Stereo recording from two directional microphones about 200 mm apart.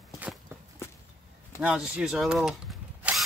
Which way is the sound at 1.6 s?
5° right (ahead or behind).